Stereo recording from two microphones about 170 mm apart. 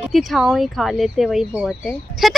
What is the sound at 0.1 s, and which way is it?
A woman's voice, centre (ahead or behind).